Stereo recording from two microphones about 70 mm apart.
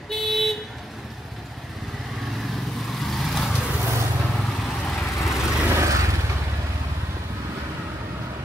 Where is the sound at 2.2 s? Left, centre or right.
Centre.